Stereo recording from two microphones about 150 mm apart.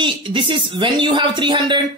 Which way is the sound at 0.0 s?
35° right (ahead or behind).